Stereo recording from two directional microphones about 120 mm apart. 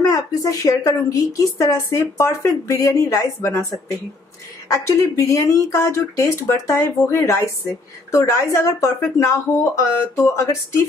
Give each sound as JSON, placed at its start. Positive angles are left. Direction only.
{"t": 0.0, "sound": "speech", "side_deg": 30}
{"t": 4.6, "sound": "speech", "side_deg": 25}